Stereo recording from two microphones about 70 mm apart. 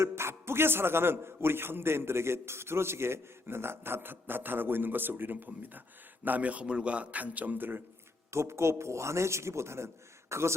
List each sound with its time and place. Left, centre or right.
0.0 s a man's voice: right
8.3 s a man's voice: right